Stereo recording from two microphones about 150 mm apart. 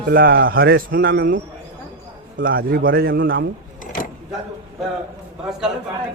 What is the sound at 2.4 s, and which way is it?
A man's voice, 75° right (ahead or behind).